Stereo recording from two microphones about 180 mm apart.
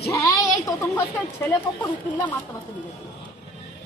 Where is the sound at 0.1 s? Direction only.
15° left (ahead or behind).